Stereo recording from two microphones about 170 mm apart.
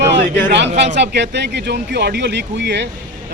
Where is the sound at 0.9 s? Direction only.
90° right.